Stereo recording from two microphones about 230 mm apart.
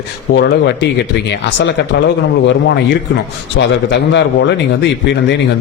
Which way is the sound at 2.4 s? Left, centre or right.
Left.